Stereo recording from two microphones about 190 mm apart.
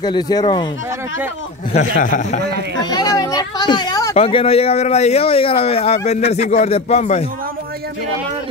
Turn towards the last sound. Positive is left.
turn(degrees=35)  # may be behind; listen again after turning